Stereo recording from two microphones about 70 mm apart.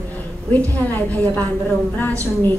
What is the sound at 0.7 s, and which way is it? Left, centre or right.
A woman's voice, left.